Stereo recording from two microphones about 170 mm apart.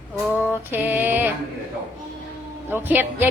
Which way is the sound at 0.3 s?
15° left (ahead or behind).